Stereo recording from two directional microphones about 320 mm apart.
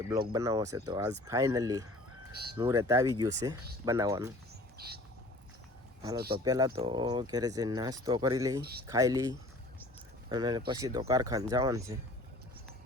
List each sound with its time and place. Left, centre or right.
0.0 s speech: centre
4.8 s bird: right
6.3 s speech: centre